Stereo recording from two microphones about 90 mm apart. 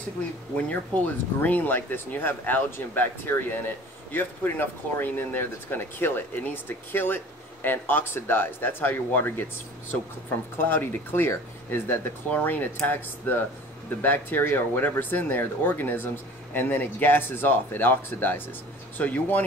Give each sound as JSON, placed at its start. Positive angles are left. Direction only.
{"t": 0.6, "sound": "speech", "side_deg": 15}
{"t": 10.6, "sound": "speech", "side_deg": 25}